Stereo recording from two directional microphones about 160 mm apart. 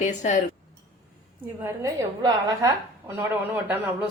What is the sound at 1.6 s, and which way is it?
A woman's voice, 20° right (ahead or behind).